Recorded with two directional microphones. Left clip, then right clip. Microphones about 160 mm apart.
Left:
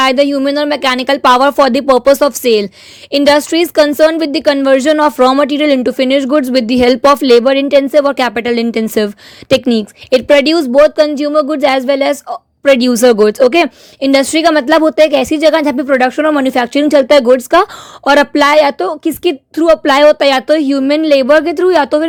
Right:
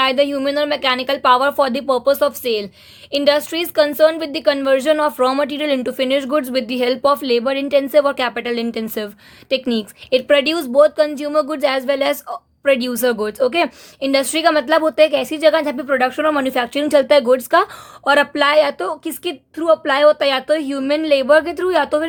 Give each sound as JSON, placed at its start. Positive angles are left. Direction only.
{"t": 0.0, "sound": "a woman's voice", "side_deg": 40}
{"t": 12.6, "sound": "a woman's voice", "side_deg": 45}